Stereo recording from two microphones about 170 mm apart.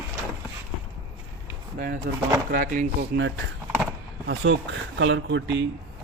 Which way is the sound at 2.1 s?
65° right (ahead or behind).